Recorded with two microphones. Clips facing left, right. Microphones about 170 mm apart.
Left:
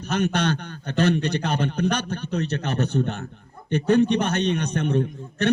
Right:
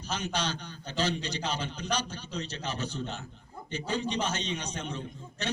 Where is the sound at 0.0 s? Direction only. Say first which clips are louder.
Left 10 dB; 60° left (ahead or behind).